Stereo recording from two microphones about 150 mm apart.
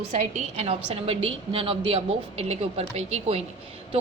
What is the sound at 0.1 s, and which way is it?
A woman's voice, 50° right (ahead or behind).